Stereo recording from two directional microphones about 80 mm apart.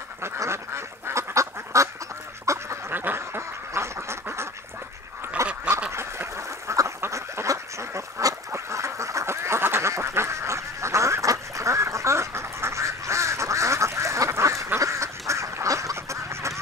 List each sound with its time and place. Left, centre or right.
0.2 s duck: right
2.9 s duck: right